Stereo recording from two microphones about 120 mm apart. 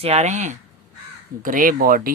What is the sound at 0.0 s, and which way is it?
Speech, 65° right (ahead or behind).